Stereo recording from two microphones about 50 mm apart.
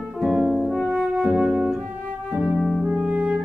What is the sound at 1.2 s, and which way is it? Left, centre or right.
Music, centre.